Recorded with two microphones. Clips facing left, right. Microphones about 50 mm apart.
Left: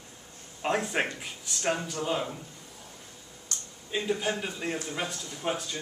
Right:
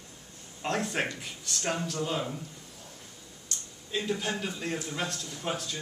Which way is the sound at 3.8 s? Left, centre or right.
Centre.